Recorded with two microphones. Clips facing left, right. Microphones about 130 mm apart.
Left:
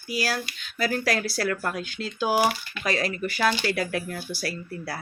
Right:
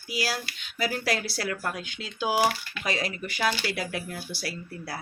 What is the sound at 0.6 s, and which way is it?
Speech, 20° right (ahead or behind).